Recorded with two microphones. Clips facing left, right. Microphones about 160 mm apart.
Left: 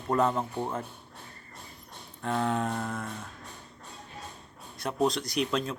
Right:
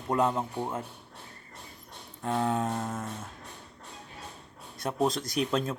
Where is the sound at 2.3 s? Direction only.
25° right (ahead or behind).